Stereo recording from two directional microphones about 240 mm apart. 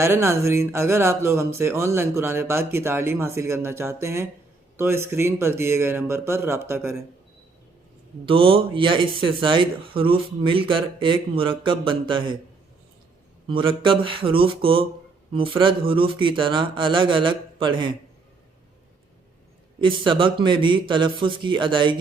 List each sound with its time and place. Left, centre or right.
0.0 s speech: centre
8.2 s speech: right
13.5 s speech: right
19.8 s speech: right